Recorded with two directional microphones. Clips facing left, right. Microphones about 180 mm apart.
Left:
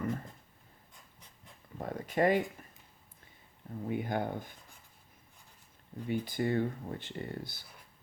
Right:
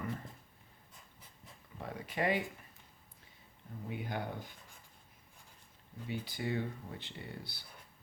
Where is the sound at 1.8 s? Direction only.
45° left (ahead or behind).